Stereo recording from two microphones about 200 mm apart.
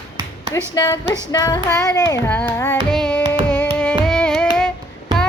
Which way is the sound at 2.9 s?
5° left (ahead or behind).